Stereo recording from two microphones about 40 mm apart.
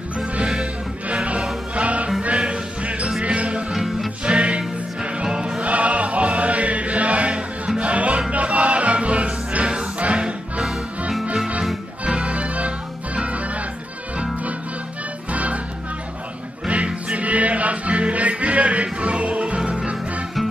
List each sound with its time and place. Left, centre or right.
1.0 s music: right
3.7 s music: centre
4.2 s music: right
5.6 s chant: right
7.8 s music: right
15.3 s music: right
16.6 s music: right